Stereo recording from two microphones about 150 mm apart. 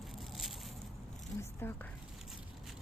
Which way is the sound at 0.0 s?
Centre (ahead or behind).